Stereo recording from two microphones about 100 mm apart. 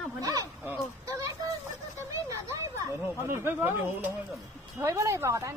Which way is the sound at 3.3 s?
20° right (ahead or behind).